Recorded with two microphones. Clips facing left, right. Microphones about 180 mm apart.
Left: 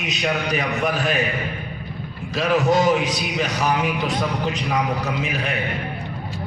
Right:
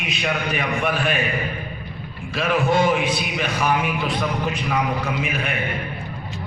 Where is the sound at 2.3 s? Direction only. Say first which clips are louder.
Left 1 dB; 40° left (ahead or behind).